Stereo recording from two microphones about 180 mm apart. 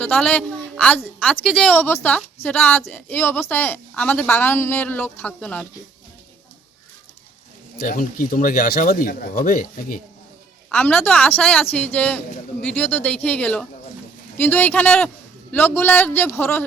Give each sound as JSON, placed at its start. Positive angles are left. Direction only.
{"t": 0.0, "sound": "a woman's voice", "side_deg": 5}
{"t": 7.8, "sound": "speech", "side_deg": 50}
{"t": 10.7, "sound": "a woman's voice", "side_deg": 10}